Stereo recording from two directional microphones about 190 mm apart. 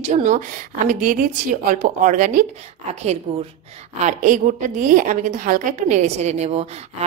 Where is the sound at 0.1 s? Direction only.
45° right (ahead or behind).